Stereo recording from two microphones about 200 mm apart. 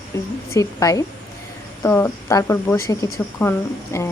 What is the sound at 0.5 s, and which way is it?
Speech, 15° left (ahead or behind).